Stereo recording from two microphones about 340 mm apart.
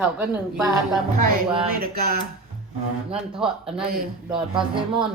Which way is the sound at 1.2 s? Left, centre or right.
Right.